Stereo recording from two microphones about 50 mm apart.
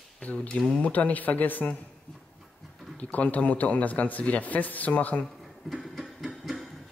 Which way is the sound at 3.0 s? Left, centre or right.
Left.